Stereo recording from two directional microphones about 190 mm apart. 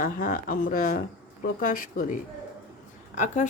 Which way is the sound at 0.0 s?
45° left (ahead or behind).